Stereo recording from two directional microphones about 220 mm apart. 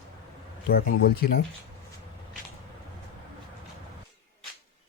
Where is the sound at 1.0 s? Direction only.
45° left (ahead or behind).